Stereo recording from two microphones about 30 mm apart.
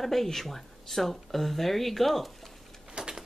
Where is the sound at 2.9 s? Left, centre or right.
Right.